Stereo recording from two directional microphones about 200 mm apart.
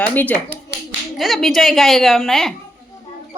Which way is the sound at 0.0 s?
10° left (ahead or behind).